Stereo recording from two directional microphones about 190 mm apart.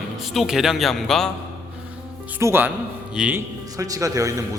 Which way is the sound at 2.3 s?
10° right (ahead or behind).